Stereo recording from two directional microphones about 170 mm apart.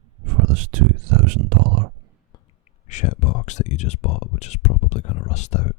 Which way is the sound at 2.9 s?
45° left (ahead or behind).